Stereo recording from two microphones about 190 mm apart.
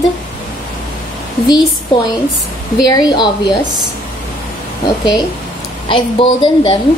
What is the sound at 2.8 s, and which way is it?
Speech, 20° left (ahead or behind).